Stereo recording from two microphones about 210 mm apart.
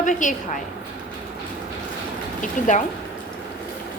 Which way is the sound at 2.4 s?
35° left (ahead or behind).